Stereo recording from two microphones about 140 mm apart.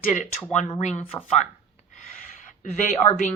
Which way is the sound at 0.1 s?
55° left (ahead or behind).